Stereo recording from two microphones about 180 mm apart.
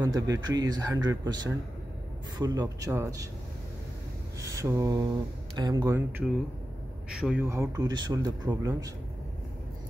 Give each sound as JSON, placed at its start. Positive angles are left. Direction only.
{"t": 0.0, "sound": "a man's voice", "side_deg": -20}
{"t": 4.4, "sound": "a sound", "side_deg": -15}
{"t": 5.6, "sound": "a man's voice", "side_deg": -25}